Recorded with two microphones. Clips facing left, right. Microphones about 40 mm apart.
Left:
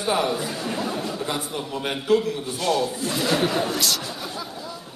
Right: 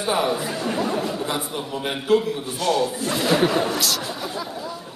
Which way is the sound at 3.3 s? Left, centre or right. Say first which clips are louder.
Right 4 dB; centre.